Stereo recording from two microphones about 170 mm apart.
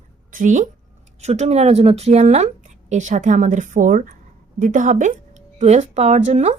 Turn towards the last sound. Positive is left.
turn(degrees=-40)  # may be behind; listen again after turning